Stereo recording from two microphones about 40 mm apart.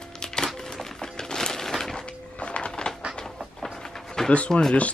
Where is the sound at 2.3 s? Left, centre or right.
Left.